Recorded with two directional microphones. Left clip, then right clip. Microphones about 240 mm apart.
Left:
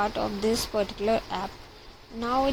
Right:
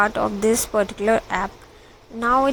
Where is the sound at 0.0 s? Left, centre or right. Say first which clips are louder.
Right 7 dB; centre.